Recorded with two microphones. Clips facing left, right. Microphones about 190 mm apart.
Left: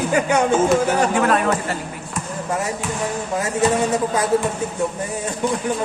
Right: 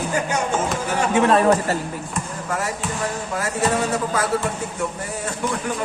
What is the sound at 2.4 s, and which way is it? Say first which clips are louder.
Speech: left 3 dB; 20° left (ahead or behind).